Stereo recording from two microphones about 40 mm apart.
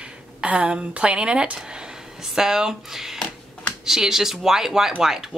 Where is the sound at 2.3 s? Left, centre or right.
Centre.